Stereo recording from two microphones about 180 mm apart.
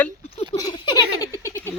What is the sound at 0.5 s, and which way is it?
Giggle, 25° left (ahead or behind).